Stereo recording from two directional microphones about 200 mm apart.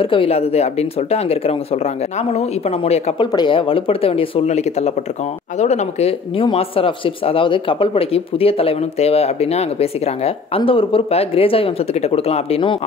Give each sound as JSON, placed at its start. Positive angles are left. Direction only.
{"t": 0.0, "sound": "speech", "side_deg": 25}